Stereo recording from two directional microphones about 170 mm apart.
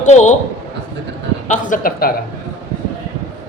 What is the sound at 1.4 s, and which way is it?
Speech, 50° left (ahead or behind).